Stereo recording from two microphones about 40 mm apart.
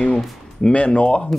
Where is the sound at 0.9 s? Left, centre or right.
Left.